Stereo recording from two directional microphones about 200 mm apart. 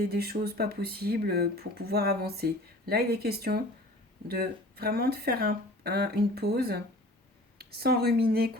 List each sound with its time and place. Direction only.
0.0 s speech: 50° right (ahead or behind)